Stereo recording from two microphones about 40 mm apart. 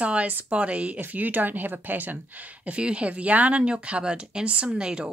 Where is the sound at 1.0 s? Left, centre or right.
Right.